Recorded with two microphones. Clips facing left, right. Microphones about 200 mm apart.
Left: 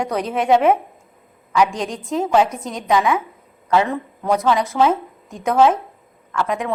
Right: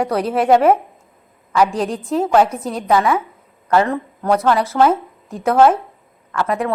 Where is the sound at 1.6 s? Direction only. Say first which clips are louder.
Right 5 dB; 35° right (ahead or behind).